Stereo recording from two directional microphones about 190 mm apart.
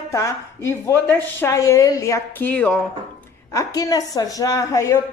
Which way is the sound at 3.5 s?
20° left (ahead or behind).